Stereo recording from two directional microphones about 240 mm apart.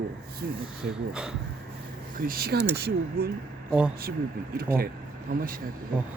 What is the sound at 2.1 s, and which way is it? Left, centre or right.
Speech, right.